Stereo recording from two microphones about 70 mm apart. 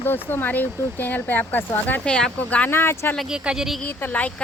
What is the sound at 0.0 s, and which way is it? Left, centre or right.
Speech, left.